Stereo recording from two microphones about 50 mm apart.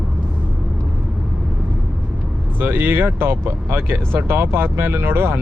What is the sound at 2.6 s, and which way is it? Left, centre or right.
Speech, right.